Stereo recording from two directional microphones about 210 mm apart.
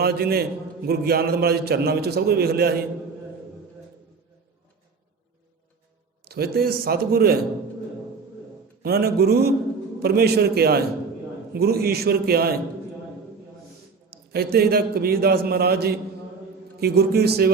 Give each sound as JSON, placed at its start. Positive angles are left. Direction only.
{"t": 0.0, "sound": "a man's voice", "side_deg": -45}
{"t": 6.2, "sound": "a man's voice", "side_deg": -50}
{"t": 8.8, "sound": "a man's voice", "side_deg": -45}
{"t": 14.1, "sound": "a man's voice", "side_deg": -50}